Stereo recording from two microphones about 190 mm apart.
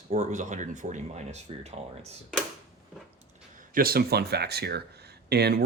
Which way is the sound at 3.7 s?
50° right (ahead or behind).